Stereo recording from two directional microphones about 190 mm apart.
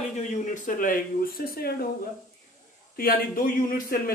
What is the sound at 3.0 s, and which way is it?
Speech, 50° left (ahead or behind).